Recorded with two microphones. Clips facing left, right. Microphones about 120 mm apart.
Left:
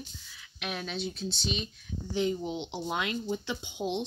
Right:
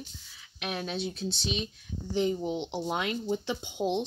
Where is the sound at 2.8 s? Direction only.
25° right (ahead or behind).